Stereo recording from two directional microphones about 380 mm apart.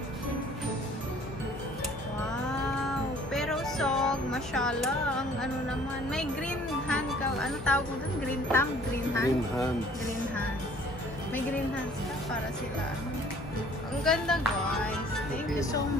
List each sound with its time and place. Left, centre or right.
3.3 s music: centre
6.9 s speech: centre
14.0 s speech: centre